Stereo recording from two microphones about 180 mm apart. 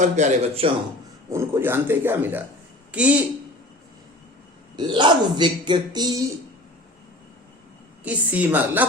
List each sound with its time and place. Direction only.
0.0 s a man's voice: 40° right (ahead or behind)
1.3 s a man's voice: 15° right (ahead or behind)
4.8 s speech: 25° right (ahead or behind)
8.0 s a man's voice: 10° right (ahead or behind)